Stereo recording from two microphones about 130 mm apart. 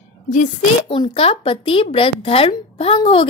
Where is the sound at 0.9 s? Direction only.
45° left (ahead or behind).